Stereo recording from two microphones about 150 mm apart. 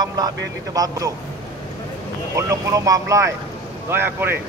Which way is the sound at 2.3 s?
20° right (ahead or behind).